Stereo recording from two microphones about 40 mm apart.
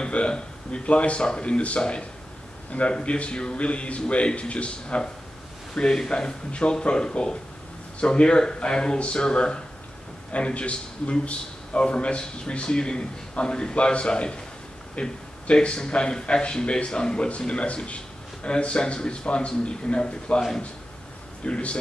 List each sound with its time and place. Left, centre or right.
0.0 s a man's voice: left
21.5 s speech: left